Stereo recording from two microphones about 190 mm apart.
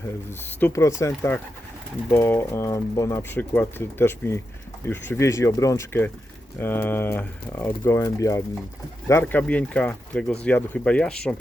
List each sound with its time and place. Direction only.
0.3 s speech: 15° left (ahead or behind)